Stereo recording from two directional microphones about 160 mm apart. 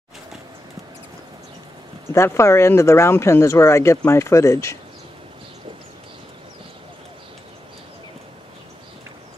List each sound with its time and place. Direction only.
2.1 s speech: 15° left (ahead or behind)